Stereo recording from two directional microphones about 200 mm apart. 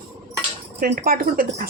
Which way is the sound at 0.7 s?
50° right (ahead or behind).